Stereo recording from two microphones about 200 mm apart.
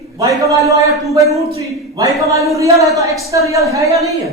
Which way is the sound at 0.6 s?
15° right (ahead or behind).